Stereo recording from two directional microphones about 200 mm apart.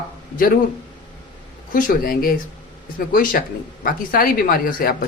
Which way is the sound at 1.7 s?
40° left (ahead or behind).